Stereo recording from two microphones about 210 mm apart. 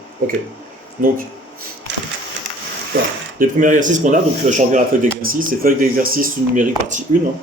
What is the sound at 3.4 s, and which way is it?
Speech, 40° right (ahead or behind).